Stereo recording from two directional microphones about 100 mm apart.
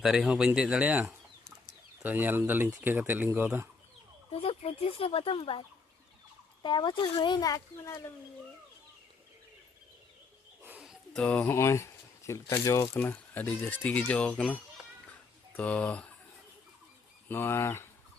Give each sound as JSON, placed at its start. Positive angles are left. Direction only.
{"t": 0.0, "sound": "speech", "side_deg": -5}
{"t": 4.3, "sound": "speech", "side_deg": 80}
{"t": 6.6, "sound": "speech", "side_deg": 50}
{"t": 10.6, "sound": "wild animals", "side_deg": -20}
{"t": 11.1, "sound": "speech", "side_deg": 10}
{"t": 11.5, "sound": "speech", "side_deg": 30}
{"t": 12.9, "sound": "speech", "side_deg": 20}
{"t": 17.2, "sound": "speech", "side_deg": 25}